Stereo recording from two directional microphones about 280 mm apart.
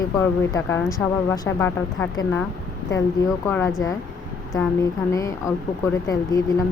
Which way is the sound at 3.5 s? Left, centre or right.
Centre.